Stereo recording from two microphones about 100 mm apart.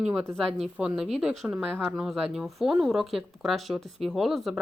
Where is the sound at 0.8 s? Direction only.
5° right (ahead or behind).